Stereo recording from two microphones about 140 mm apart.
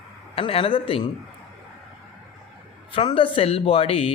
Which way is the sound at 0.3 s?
40° left (ahead or behind).